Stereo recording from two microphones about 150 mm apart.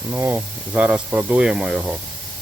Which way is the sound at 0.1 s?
10° right (ahead or behind).